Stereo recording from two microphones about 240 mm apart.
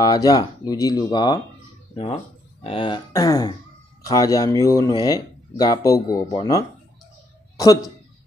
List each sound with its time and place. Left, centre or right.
0.0 s speech: centre
2.6 s a woman's voice: left